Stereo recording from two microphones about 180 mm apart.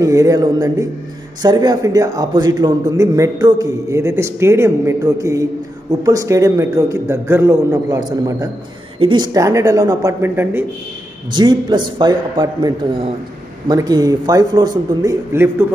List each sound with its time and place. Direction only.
0.0 s a man's voice: 20° right (ahead or behind)
11.3 s a man's voice: 25° right (ahead or behind)